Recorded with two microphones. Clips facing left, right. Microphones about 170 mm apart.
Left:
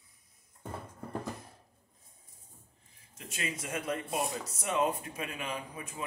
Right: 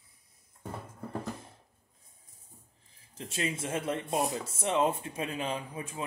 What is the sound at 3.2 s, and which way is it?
Speech, 30° right (ahead or behind).